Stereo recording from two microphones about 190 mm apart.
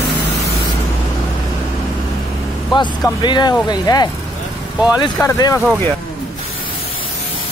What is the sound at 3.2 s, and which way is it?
Speech, 25° left (ahead or behind).